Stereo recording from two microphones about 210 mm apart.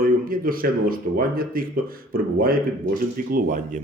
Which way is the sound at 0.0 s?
45° right (ahead or behind).